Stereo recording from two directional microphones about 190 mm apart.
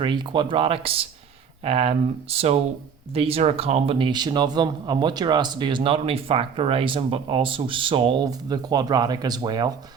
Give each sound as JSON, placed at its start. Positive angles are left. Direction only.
{"t": 0.0, "sound": "speech", "side_deg": -25}